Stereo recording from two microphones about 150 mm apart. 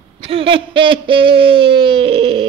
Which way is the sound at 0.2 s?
40° right (ahead or behind).